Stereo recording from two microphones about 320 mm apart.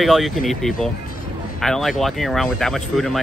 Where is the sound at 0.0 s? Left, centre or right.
Centre.